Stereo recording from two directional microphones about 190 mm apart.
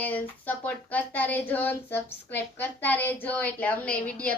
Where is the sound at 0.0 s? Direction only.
10° left (ahead or behind).